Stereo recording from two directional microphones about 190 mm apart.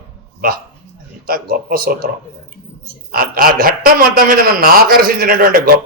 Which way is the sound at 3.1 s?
50° right (ahead or behind).